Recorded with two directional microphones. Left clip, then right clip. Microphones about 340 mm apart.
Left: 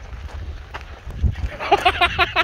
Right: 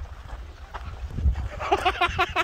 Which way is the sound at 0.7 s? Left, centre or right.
Left.